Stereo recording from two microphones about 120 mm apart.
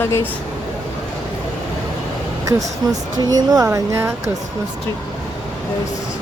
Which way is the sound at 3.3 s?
30° right (ahead or behind).